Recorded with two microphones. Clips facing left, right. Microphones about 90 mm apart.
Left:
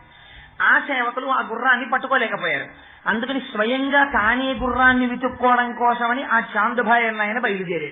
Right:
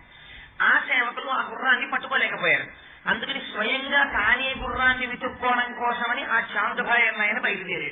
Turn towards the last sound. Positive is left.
turn(degrees=30)  # may be behind; listen again after turning